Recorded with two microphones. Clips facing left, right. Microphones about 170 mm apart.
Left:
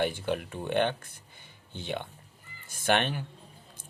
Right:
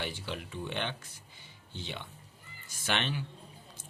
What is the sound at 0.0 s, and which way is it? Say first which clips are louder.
Speech: left 9 dB; 50° left (ahead or behind).